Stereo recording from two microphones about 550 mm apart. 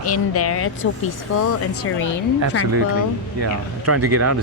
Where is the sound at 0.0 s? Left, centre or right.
Left.